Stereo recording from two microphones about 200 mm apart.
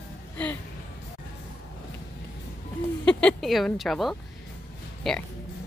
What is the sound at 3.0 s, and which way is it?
A woman's voice, 5° left (ahead or behind).